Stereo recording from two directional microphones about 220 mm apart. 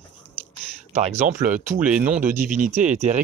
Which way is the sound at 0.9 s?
30° right (ahead or behind).